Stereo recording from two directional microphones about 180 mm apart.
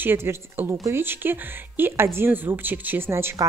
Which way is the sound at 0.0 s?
15° right (ahead or behind).